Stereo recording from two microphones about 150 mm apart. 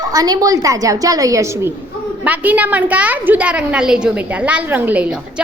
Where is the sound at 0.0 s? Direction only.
25° right (ahead or behind).